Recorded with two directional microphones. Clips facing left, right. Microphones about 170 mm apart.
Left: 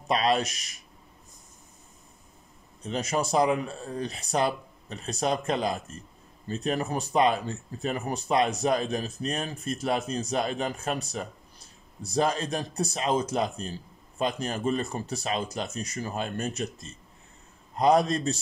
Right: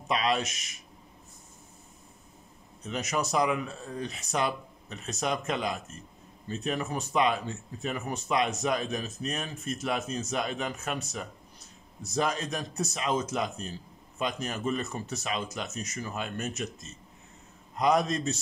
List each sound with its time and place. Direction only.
0.1 s speech: 35° left (ahead or behind)
2.8 s speech: 30° left (ahead or behind)